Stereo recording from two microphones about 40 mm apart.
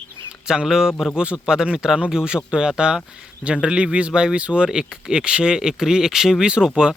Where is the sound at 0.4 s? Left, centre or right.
Centre.